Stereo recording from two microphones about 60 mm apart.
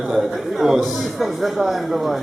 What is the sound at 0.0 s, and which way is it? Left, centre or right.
Speech, centre.